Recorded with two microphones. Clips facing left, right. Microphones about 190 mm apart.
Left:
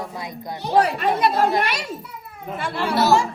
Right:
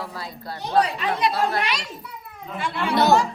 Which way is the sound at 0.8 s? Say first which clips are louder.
Left 3 dB; 60° left (ahead or behind).